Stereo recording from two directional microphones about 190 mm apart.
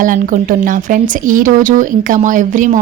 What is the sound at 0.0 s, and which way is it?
A woman's voice, 45° right (ahead or behind).